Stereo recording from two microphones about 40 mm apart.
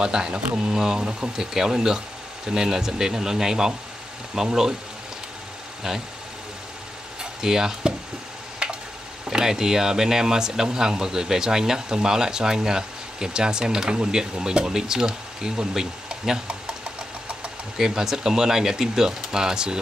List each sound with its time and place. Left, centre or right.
0.0 s speech: centre
1.0 s speech: right
1.4 s speech: centre
5.9 s speech: centre
7.2 s speech: centre
9.3 s speech: centre
17.7 s speech: centre